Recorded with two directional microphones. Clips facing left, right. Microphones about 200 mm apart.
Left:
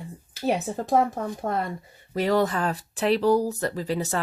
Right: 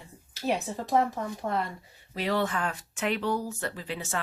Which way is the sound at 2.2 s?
40° left (ahead or behind).